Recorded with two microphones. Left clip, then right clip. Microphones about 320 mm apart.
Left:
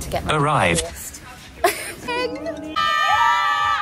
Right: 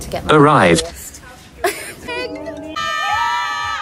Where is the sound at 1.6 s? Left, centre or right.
Centre.